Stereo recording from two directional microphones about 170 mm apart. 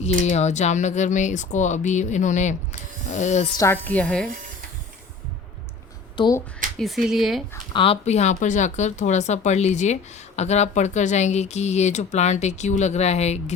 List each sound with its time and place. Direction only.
0.0 s speech: 40° left (ahead or behind)
3.6 s a woman's voice: 10° left (ahead or behind)
6.1 s speech: 25° left (ahead or behind)
6.7 s speech: centre (ahead or behind)
7.7 s speech: 30° left (ahead or behind)